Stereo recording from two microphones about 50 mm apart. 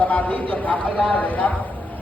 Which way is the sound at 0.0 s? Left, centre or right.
Left.